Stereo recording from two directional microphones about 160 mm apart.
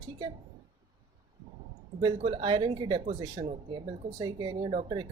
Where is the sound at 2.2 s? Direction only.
35° right (ahead or behind).